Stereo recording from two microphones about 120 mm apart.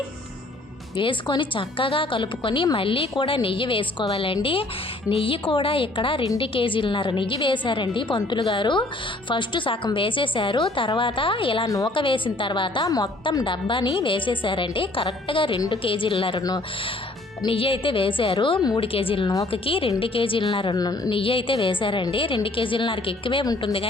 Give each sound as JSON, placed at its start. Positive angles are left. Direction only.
{"t": 0.9, "sound": "a woman's voice", "side_deg": 45}
{"t": 11.6, "sound": "a woman's voice", "side_deg": 30}
{"t": 11.9, "sound": "a woman's voice", "side_deg": 45}
{"t": 17.4, "sound": "a woman's voice", "side_deg": 50}
{"t": 21.1, "sound": "a woman's voice", "side_deg": 50}